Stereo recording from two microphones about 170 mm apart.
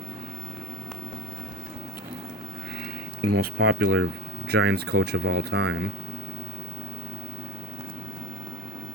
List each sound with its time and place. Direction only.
3.2 s speech: 60° right (ahead or behind)
4.4 s speech: 75° right (ahead or behind)